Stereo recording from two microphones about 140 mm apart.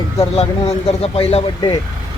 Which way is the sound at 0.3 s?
50° left (ahead or behind).